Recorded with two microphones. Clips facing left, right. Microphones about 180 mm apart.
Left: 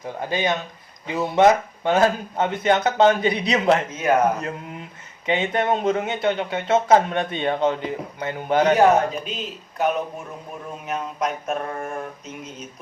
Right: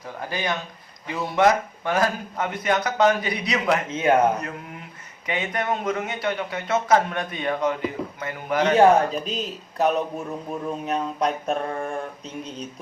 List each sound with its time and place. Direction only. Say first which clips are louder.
0.0 s speech: left 5 dB; 20° left (ahead or behind)
3.8 s speech: right 2 dB; 25° right (ahead or behind)
5.2 s speech: left 5 dB; 25° left (ahead or behind)
8.7 s a man's voice: right 3 dB; 30° right (ahead or behind)